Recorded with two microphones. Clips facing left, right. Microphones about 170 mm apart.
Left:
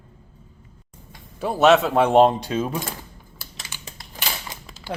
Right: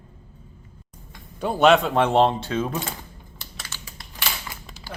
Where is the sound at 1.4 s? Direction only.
5° left (ahead or behind).